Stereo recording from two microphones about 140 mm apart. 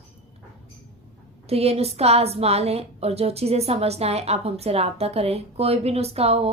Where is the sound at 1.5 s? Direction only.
45° right (ahead or behind).